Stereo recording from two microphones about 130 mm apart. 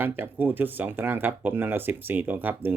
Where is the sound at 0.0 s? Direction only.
15° right (ahead or behind).